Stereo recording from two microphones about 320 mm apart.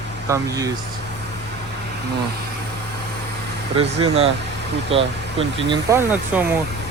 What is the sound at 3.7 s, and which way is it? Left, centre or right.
Speech, centre.